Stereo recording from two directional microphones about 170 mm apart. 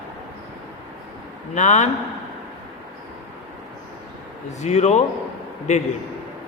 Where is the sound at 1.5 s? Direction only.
45° left (ahead or behind).